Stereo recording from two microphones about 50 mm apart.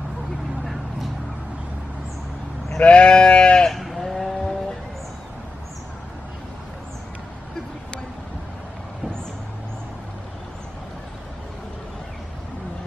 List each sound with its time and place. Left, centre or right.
2.8 s sheep: left
3.7 s sheep: centre